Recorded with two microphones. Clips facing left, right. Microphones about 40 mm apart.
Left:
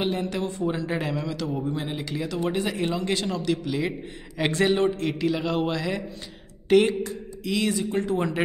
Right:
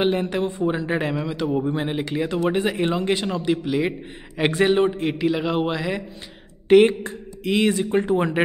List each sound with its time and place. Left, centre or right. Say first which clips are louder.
0.0 s speech: right 5 dB; right
1.6 s a man's voice: right 5 dB; right; by 6.0 s centre
6.7 s speech: right 5 dB; right